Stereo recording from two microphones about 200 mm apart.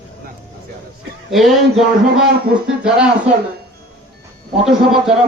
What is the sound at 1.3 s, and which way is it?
Speech, centre (ahead or behind).